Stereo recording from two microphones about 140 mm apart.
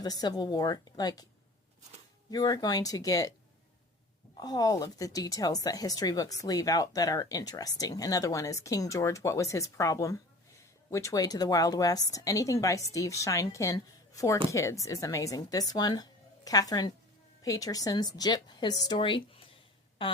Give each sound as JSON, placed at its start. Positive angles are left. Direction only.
{"t": 0.0, "sound": "speech", "side_deg": 30}
{"t": 2.3, "sound": "speech", "side_deg": 25}
{"t": 4.4, "sound": "speech", "side_deg": 30}